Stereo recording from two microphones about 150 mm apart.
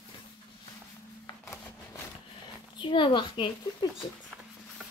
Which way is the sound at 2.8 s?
30° left (ahead or behind).